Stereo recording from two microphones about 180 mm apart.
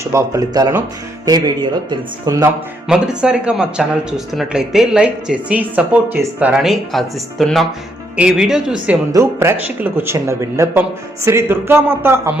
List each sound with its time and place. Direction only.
0.0 s speech: 15° right (ahead or behind)
2.9 s speech: 5° right (ahead or behind)
8.9 s speech: 15° right (ahead or behind)